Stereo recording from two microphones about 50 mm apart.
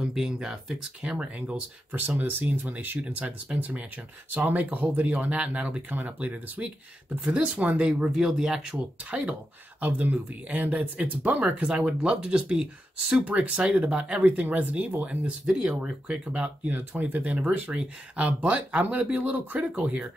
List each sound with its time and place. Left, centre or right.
0.0 s speech: centre
1.1 s speech: right
3.0 s speech: right
8.1 s speech: centre
9.1 s speech: right
14.2 s speech: right
15.0 s speech: centre
16.6 s speech: right